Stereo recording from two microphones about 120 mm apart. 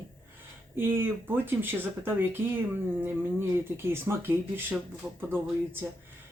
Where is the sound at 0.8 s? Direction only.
15° right (ahead or behind).